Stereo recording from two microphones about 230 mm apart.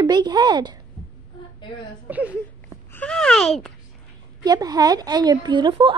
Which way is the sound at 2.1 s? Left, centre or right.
Centre.